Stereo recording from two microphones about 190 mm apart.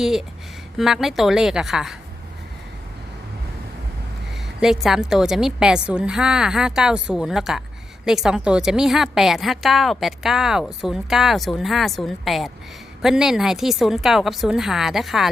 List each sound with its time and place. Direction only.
0.0 s a woman's voice: centre (ahead or behind)
4.6 s a woman's voice: centre (ahead or behind)